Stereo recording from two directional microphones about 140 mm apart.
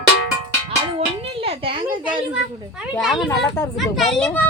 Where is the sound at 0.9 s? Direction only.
45° right (ahead or behind).